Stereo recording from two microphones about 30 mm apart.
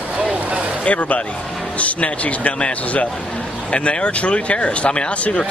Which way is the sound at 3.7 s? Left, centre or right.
Left.